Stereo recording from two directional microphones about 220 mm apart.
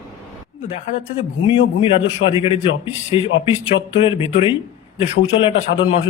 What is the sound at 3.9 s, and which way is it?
Speech, 25° left (ahead or behind).